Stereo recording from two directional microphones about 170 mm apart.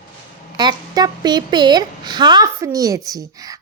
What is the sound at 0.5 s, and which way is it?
Speech, 25° right (ahead or behind).